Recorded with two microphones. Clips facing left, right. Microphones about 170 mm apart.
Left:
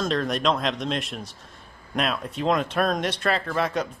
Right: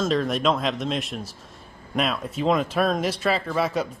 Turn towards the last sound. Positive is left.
turn(degrees=-5)  # may be behind; listen again after turning